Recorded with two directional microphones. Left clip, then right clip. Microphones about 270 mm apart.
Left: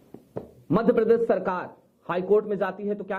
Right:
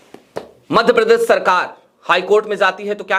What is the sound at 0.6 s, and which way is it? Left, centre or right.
A man's voice, centre.